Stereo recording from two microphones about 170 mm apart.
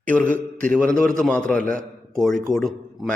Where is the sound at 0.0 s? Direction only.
10° left (ahead or behind).